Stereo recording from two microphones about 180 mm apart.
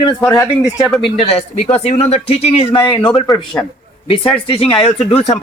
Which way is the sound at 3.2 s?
5° left (ahead or behind).